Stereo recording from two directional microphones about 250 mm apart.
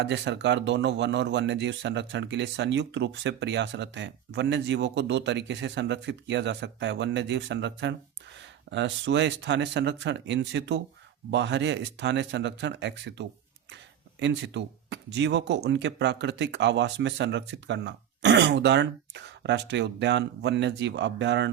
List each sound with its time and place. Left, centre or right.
0.0 s speech: right